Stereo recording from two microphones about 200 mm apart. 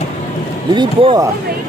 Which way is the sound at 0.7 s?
25° right (ahead or behind).